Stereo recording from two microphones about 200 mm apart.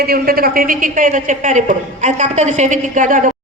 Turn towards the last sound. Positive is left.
turn(degrees=-40)  # may be behind; listen again after turning